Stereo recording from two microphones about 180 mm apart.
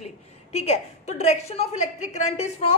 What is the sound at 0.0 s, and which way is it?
A woman's voice, 35° left (ahead or behind).